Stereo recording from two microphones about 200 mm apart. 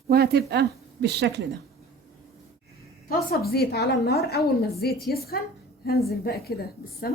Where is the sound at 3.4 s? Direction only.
50° left (ahead or behind).